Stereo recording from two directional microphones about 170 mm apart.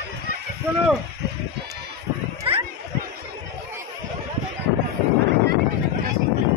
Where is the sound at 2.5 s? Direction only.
35° right (ahead or behind).